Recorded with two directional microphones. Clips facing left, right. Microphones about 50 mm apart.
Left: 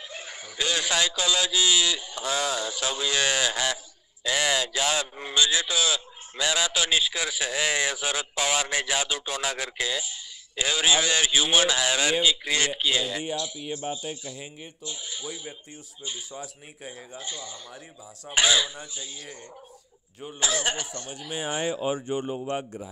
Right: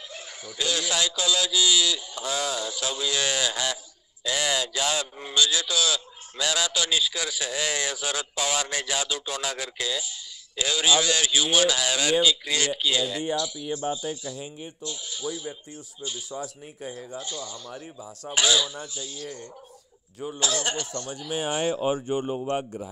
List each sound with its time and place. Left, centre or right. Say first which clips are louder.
0.1 s a man's voice: left 1 dB; left
14.9 s a man's voice: right 3 dB; left
20.3 s a man's voice: left 1 dB; left